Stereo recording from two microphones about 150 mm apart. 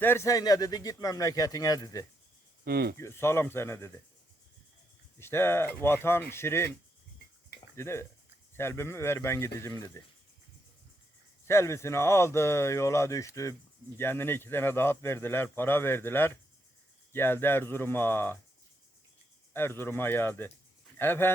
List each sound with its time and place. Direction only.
0.0 s speech: 15° left (ahead or behind)
2.6 s speech: 90° right
3.0 s a man's voice: 15° left (ahead or behind)
5.2 s a man's voice: 15° left (ahead or behind)
7.8 s a man's voice: 15° left (ahead or behind)
11.4 s a man's voice: 20° left (ahead or behind)
19.5 s a man's voice: 15° left (ahead or behind)